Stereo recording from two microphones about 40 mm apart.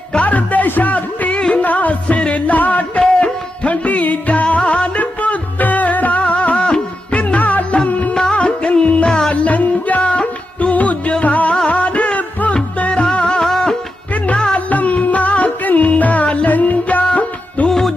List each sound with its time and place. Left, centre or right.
0.2 s music: left
1.4 s music: left
1.6 s music: left
8.1 s music: left
9.0 s music: centre
9.3 s music: left
14.7 s music: left
16.5 s music: left
17.7 s music: centre